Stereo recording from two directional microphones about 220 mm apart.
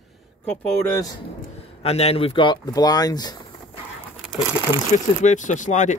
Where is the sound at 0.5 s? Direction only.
15° left (ahead or behind).